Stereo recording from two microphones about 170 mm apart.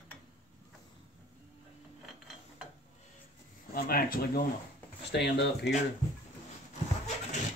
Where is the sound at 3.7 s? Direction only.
60° left (ahead or behind).